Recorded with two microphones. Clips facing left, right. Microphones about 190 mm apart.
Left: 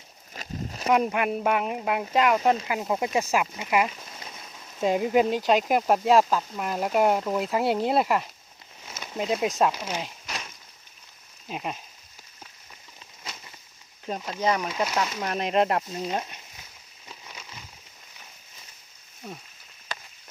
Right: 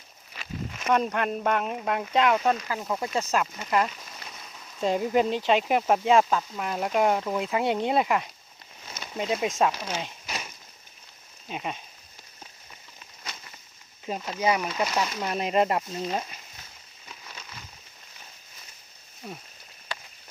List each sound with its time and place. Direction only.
0.3 s a sound: 35° left (ahead or behind)
0.9 s speech: 10° left (ahead or behind)
2.6 s speech: 20° left (ahead or behind); by 9.7 s centre (ahead or behind)
9.7 s speech: 15° left (ahead or behind)
10.0 s a sound: centre (ahead or behind)
11.4 s speech: centre (ahead or behind)
14.3 s speech: 10° right (ahead or behind)
17.2 s a sound: 10° left (ahead or behind)
19.2 s speech: centre (ahead or behind)